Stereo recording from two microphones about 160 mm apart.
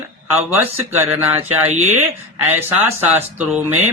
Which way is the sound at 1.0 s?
15° right (ahead or behind).